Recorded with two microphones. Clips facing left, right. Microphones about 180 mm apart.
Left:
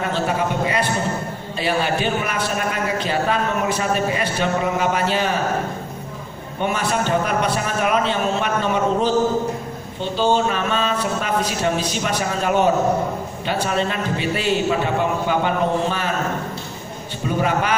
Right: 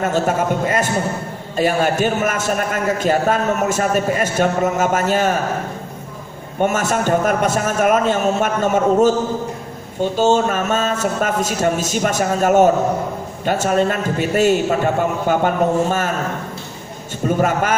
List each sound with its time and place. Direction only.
0.0 s a man's voice: 45° right (ahead or behind)
6.6 s a man's voice: 45° right (ahead or behind)
17.4 s a man's voice: 45° right (ahead or behind)